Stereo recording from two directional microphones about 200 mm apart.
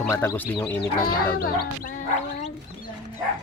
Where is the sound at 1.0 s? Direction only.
50° left (ahead or behind).